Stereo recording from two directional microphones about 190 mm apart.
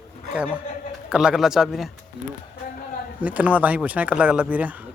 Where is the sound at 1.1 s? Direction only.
5° right (ahead or behind).